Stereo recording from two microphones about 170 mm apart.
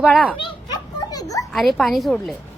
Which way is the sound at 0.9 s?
20° left (ahead or behind).